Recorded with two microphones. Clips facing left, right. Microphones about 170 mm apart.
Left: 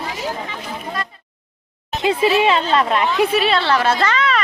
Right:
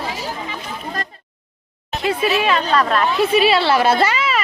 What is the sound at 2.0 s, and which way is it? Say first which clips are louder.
A woman's voice: left 3 dB; 25° left (ahead or behind).